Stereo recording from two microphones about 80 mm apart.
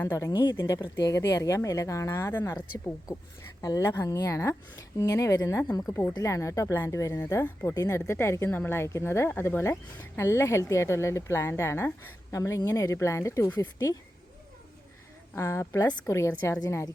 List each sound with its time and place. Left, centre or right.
0.3 s speech: left
0.8 s a woman's voice: left
1.1 s speech: left
3.6 s speech: left
3.8 s speech: left
5.6 s speech: left
6.1 s speech: left
13.6 s speech: left
15.4 s speech: left